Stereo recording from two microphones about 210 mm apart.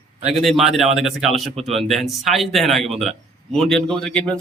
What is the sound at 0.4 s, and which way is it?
A man's voice, centre (ahead or behind).